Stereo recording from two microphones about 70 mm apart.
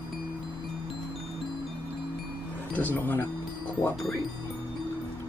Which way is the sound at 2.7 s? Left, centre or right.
Left.